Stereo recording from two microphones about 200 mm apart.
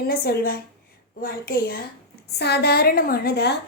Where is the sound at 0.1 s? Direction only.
50° left (ahead or behind).